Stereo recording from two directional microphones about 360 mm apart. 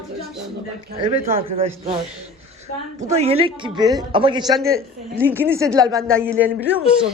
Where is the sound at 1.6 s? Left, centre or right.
Centre.